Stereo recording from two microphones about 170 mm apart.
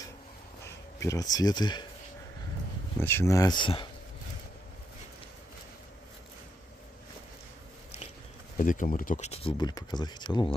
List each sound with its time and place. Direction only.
0.9 s speech: 20° left (ahead or behind)
3.0 s speech: 15° left (ahead or behind)
8.5 s speech: 50° left (ahead or behind); by 10.5 s 25° left (ahead or behind)